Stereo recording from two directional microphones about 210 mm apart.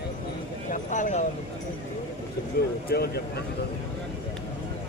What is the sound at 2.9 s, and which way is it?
Speech, 50° left (ahead or behind).